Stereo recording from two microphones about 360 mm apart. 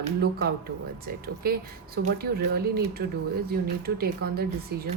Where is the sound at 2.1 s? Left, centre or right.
Right.